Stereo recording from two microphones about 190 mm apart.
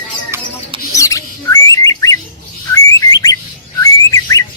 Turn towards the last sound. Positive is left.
turn(degrees=20)  # may be behind; listen again after turning